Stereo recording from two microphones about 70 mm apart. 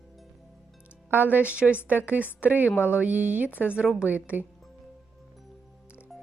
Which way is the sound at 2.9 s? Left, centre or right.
Right.